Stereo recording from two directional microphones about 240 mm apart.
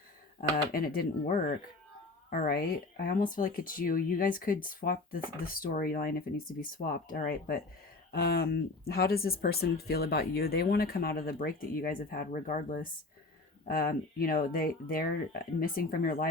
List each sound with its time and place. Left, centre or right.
0.5 s speech: left
2.3 s speech: left